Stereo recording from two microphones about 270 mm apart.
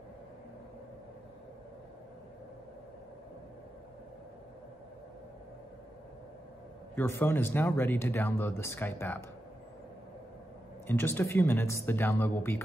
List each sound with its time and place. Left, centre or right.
7.0 s speech: centre
10.9 s speech: centre